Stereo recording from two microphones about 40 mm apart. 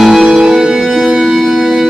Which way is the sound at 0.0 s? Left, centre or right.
Centre.